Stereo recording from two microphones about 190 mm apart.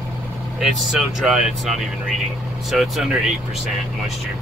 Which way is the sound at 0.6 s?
Centre (ahead or behind).